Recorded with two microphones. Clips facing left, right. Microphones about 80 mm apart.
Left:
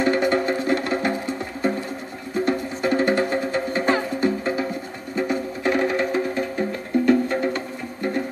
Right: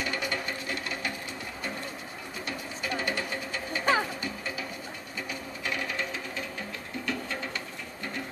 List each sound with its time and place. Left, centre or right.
0.0 s music: left
2.3 s music: left